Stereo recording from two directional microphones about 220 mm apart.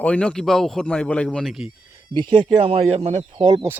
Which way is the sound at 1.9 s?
20° right (ahead or behind).